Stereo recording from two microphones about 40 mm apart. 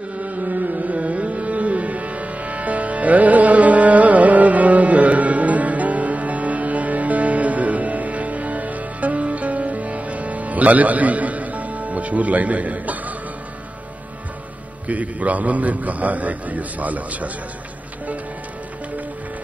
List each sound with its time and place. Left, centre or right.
0.2 s music: right
14.9 s a man's voice: right